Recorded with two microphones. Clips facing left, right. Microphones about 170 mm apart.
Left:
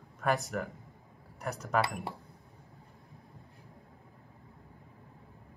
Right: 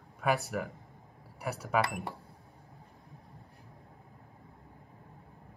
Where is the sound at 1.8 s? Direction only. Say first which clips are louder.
Even; 20° right (ahead or behind).